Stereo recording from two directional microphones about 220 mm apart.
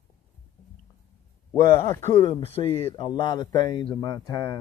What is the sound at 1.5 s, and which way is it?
Speech, 20° left (ahead or behind).